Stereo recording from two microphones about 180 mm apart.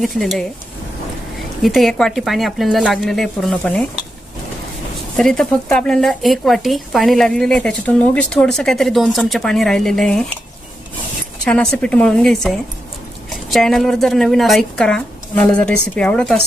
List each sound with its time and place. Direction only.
0.0 s a woman's voice: centre (ahead or behind)
1.6 s a woman's voice: centre (ahead or behind)
5.1 s a woman's voice: 5° left (ahead or behind)
11.4 s a woman's voice: 5° left (ahead or behind)